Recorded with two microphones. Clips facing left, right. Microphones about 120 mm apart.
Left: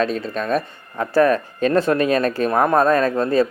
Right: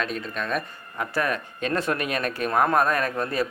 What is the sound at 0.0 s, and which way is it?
Speech, 35° left (ahead or behind).